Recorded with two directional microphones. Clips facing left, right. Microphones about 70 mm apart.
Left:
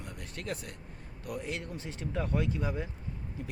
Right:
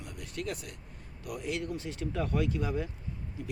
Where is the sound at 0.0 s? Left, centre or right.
Left.